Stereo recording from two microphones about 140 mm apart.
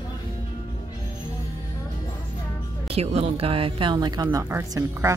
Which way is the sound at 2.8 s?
45° right (ahead or behind).